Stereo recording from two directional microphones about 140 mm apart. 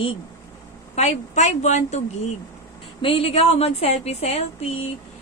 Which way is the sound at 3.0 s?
45° left (ahead or behind).